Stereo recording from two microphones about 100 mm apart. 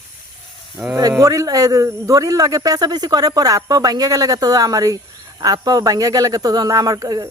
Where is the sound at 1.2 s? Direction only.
35° right (ahead or behind).